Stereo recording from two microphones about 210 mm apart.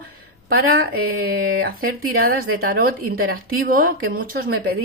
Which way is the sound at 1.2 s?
45° right (ahead or behind).